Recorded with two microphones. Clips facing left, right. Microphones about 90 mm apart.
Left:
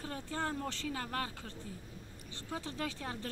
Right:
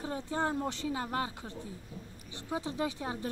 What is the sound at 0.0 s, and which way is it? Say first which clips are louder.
Speech: right 5 dB; 20° right (ahead or behind).